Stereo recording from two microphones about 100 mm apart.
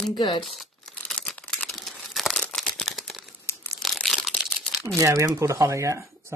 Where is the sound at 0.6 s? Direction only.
5° left (ahead or behind).